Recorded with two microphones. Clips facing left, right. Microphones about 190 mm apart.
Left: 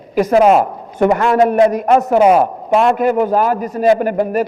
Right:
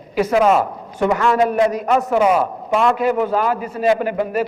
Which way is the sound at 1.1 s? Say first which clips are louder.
Left 4 dB; 45° left (ahead or behind).